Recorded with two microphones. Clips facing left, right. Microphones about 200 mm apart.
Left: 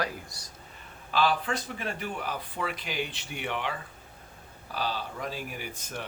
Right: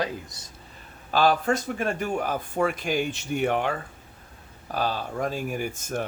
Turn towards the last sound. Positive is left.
turn(degrees=-45)  # may be behind; listen again after turning